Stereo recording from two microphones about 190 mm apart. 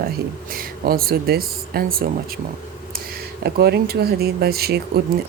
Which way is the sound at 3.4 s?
55° right (ahead or behind).